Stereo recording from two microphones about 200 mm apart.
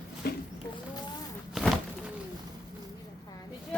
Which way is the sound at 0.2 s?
50° left (ahead or behind).